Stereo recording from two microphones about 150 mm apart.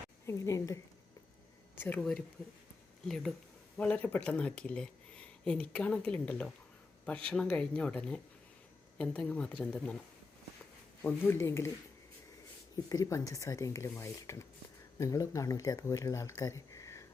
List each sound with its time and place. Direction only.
0.3 s speech: 20° left (ahead or behind)
3.8 s speech: 10° left (ahead or behind)
11.0 s speech: 15° left (ahead or behind)
12.7 s speech: 25° left (ahead or behind)